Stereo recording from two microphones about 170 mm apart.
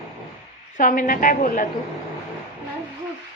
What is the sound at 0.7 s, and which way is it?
Speech, 50° left (ahead or behind).